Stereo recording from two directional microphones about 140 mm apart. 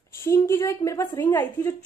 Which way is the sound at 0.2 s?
20° left (ahead or behind).